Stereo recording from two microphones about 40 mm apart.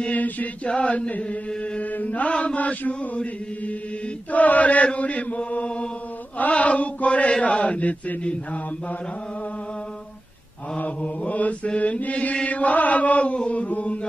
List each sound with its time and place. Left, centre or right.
0.1 s chant: left
0.7 s chant: left
11.0 s chant: left